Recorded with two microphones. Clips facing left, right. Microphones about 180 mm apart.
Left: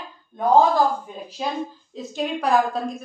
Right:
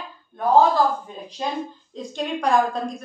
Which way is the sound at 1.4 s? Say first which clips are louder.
Even; 5° left (ahead or behind).